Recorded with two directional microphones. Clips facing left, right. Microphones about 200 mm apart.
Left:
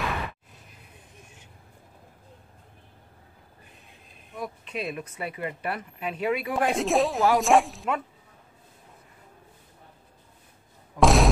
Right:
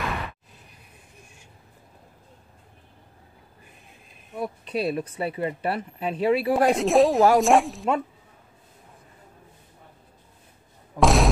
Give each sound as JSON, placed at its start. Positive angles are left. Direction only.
{"t": 4.4, "sound": "speech", "side_deg": -35}
{"t": 6.7, "sound": "speech", "side_deg": 0}
{"t": 11.0, "sound": "a sound", "side_deg": 0}